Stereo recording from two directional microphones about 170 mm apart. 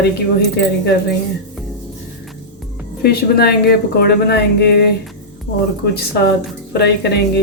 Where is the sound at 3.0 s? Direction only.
65° left (ahead or behind).